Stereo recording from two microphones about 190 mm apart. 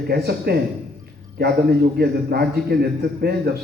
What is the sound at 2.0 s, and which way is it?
A man's voice, 55° right (ahead or behind).